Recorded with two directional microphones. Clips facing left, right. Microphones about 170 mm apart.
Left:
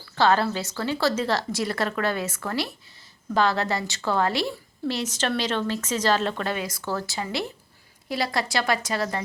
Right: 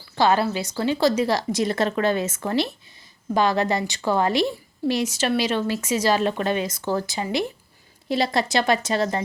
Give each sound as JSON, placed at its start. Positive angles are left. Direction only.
{"t": 0.2, "sound": "a woman's voice", "side_deg": -15}